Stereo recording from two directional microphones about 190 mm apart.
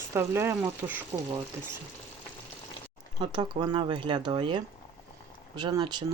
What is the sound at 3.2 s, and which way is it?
Speech, 25° right (ahead or behind).